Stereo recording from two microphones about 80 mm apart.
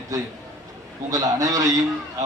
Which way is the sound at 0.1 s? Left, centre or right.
Right.